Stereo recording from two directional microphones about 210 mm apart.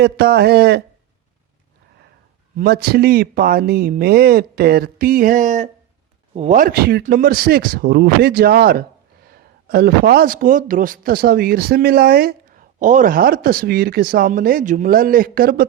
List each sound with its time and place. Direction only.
0.0 s speech: 50° right (ahead or behind)
2.6 s speech: 45° right (ahead or behind)